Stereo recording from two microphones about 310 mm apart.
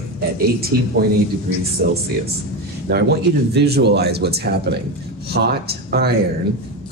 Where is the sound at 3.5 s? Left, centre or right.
Right.